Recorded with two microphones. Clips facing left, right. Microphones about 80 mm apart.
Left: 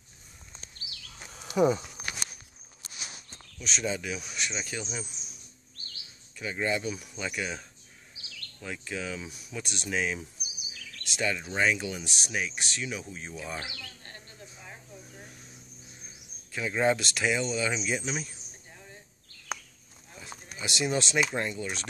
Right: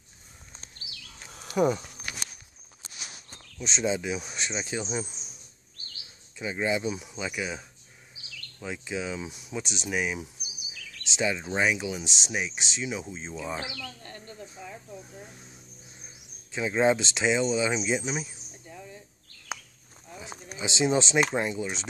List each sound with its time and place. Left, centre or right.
1.3 s a sound: centre
3.6 s speech: right
6.3 s speech: centre
7.2 s speech: centre
16.5 s speech: centre
20.2 s a sound: centre
21.4 s speech: centre